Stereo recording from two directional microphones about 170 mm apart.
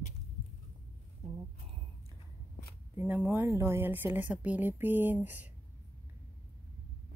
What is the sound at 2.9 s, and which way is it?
A woman's voice, 10° right (ahead or behind).